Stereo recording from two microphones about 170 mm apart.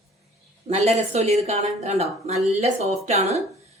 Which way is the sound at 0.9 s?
40° right (ahead or behind).